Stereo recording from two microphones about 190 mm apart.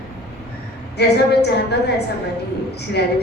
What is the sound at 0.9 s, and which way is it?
Speech, 60° left (ahead or behind).